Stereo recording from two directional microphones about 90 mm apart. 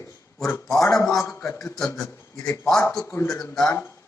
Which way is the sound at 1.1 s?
5° left (ahead or behind).